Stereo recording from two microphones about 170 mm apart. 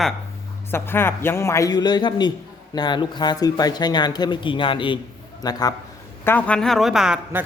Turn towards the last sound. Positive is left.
turn(degrees=-5)  # may be behind; listen again after turning